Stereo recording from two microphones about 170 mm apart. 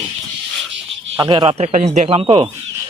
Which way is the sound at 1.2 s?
30° right (ahead or behind).